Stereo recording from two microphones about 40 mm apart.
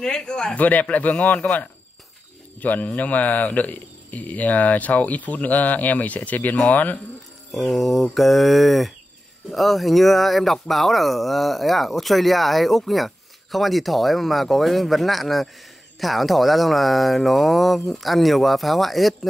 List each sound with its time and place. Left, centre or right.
0.0 s speech: left
0.6 s a man's voice: left
7.5 s speech: centre